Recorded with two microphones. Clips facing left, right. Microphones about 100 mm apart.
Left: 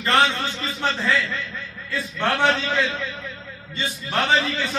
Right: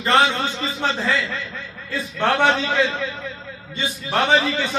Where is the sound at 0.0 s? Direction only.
20° right (ahead or behind).